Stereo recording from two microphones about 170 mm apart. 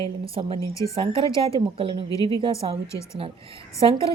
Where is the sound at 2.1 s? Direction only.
20° left (ahead or behind).